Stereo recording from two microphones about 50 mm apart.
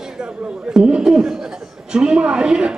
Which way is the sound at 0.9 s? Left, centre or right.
Centre.